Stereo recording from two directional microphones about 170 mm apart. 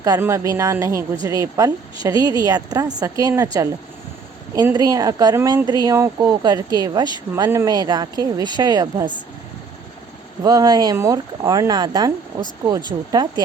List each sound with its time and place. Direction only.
0.0 s a woman's voice: 20° right (ahead or behind)
4.7 s speech: 20° right (ahead or behind)
10.4 s speech: 25° right (ahead or behind)